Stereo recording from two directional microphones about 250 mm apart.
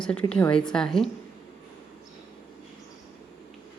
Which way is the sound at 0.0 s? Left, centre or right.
Centre.